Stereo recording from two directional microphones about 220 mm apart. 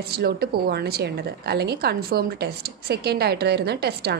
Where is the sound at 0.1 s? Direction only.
45° right (ahead or behind).